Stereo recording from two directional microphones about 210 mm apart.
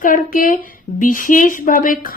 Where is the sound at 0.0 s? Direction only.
40° left (ahead or behind).